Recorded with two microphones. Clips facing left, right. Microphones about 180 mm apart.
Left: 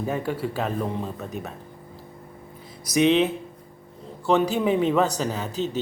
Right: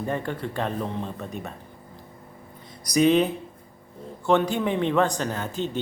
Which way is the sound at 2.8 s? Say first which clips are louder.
Even; centre (ahead or behind).